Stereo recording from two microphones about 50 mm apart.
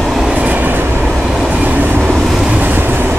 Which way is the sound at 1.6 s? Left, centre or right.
Right.